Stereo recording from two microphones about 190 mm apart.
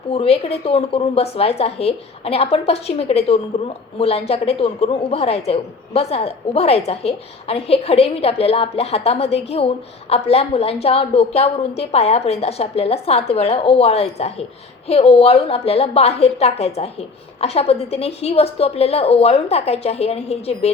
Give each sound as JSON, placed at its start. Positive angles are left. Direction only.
{"t": 0.1, "sound": "a woman's voice", "side_deg": 30}